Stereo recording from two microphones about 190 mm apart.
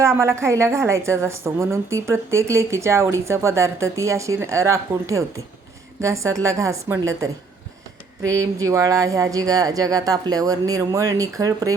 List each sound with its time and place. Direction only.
0.0 s a woman's voice: 15° right (ahead or behind)